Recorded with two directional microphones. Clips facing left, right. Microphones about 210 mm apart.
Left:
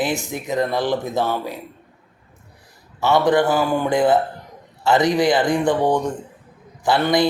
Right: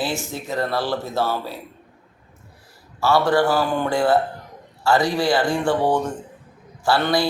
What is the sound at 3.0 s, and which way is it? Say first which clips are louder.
A man's voice: left 1 dB; 20° left (ahead or behind).